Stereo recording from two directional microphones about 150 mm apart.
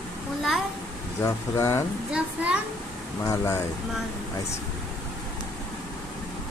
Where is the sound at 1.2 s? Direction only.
20° left (ahead or behind).